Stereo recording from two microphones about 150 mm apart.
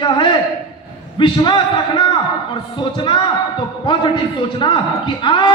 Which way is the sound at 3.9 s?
35° left (ahead or behind).